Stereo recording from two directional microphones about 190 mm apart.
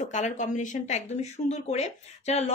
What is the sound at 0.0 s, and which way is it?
Speech, 40° left (ahead or behind).